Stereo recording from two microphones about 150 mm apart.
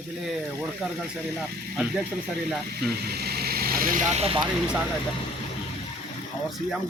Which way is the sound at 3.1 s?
90° right.